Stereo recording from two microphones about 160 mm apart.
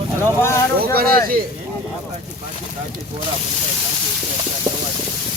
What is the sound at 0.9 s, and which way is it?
Speech, 65° right (ahead or behind).